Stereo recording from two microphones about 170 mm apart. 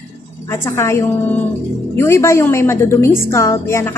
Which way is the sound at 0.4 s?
15° left (ahead or behind).